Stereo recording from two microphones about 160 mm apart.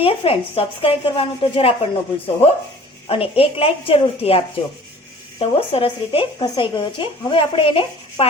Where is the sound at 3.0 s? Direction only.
35° left (ahead or behind).